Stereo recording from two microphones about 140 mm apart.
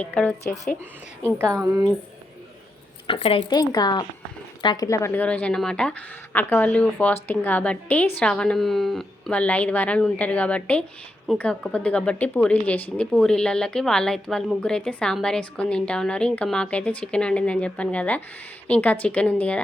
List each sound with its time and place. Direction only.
0.0 s a woman's voice: 10° left (ahead or behind)
0.5 s speech: 55° left (ahead or behind)
1.4 s a woman's voice: 20° right (ahead or behind)
3.1 s speech: 40° left (ahead or behind)
3.5 s a woman's voice: 30° left (ahead or behind); by 19.6 s 10° left (ahead or behind)